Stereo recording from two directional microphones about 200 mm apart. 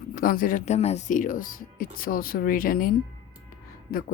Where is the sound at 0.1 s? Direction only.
45° left (ahead or behind).